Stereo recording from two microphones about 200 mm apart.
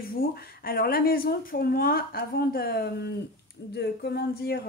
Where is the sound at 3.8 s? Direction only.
55° left (ahead or behind).